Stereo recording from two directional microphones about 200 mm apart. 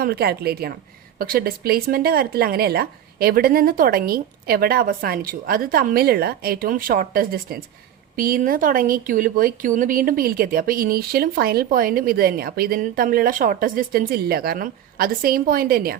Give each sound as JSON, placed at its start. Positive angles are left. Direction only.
{"t": 0.0, "sound": "speech", "side_deg": -50}